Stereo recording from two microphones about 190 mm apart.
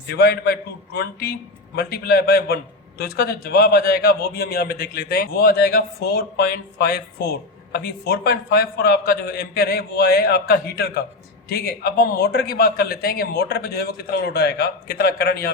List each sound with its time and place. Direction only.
0.1 s a man's voice: 55° left (ahead or behind)